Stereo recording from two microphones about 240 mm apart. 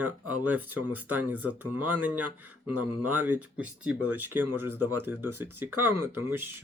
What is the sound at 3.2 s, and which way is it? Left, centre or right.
Speech, centre.